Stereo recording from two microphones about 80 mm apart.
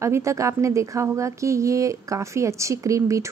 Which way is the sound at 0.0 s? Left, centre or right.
Right.